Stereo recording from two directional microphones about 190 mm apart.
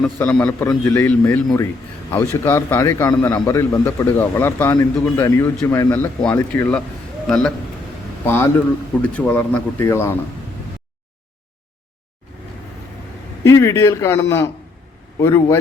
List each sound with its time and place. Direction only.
0.0 s a man's voice: 10° left (ahead or behind)
9.0 s a man's voice: 5° left (ahead or behind)
13.4 s a man's voice: 15° left (ahead or behind)